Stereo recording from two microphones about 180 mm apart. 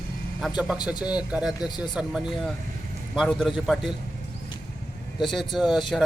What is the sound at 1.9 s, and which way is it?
A man's voice, 5° right (ahead or behind).